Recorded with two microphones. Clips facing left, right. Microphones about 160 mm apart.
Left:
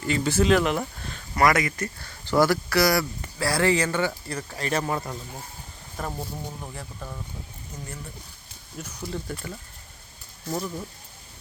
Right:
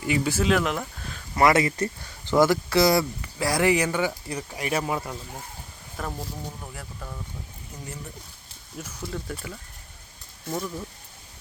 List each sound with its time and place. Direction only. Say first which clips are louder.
0.0 s speech: left 1 dB; 10° right (ahead or behind)
1.4 s speech: right 2 dB; 25° right (ahead or behind)
2.0 s speech: right 1 dB; 15° right (ahead or behind)
6.0 s speech: left 1 dB; 10° left (ahead or behind)
8.8 s speech: left 1 dB; 5° right (ahead or behind)
10.5 s speech: left 1 dB; 5° left (ahead or behind)